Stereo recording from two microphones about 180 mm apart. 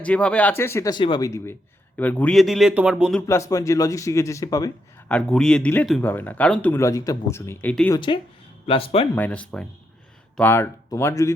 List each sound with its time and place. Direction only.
0.0 s speech: 5° left (ahead or behind)
3.2 s speech: 15° left (ahead or behind)
5.0 s speech: 5° left (ahead or behind)
7.9 s speech: 25° left (ahead or behind)
9.1 s speech: 10° left (ahead or behind)